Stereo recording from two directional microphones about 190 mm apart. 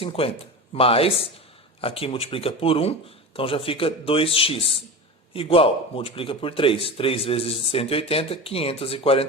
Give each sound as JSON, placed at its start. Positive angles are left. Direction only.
{"t": 0.0, "sound": "a man's voice", "side_deg": 30}